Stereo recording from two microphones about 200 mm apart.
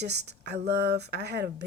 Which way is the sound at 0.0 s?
55° right (ahead or behind).